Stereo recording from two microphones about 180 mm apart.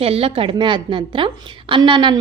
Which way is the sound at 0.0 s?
35° right (ahead or behind).